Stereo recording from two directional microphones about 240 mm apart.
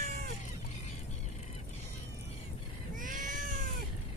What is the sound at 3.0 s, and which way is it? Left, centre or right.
Cat, right.